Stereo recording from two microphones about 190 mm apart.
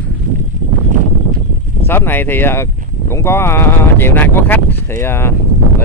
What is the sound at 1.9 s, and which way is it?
Speech, 10° left (ahead or behind).